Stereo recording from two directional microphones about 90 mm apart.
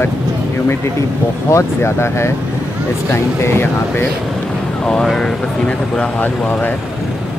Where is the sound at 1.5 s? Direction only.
30° left (ahead or behind).